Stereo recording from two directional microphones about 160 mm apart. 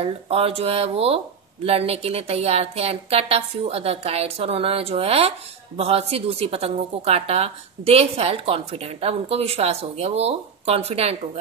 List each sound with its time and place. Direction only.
0.0 s a woman's voice: 40° right (ahead or behind)